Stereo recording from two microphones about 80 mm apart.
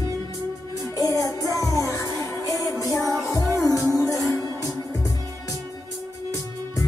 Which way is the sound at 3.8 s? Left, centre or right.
Right.